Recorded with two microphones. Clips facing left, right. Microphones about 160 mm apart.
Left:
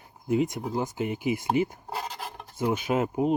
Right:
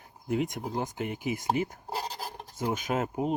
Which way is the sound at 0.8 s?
55° right (ahead or behind).